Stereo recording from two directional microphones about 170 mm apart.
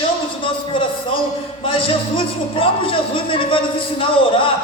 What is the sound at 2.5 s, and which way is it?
A man's voice, 30° left (ahead or behind).